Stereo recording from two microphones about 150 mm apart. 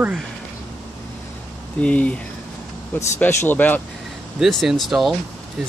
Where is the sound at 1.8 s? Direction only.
10° left (ahead or behind).